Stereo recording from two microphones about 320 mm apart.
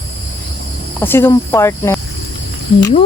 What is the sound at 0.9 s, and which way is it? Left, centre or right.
Speech, centre.